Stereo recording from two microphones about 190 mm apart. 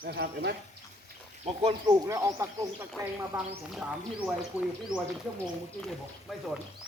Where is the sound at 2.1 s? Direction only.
15° right (ahead or behind).